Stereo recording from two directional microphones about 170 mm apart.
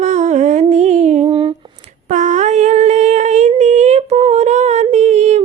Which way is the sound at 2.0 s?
45° right (ahead or behind).